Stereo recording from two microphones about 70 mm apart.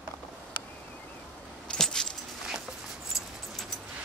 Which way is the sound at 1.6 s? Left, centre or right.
Centre.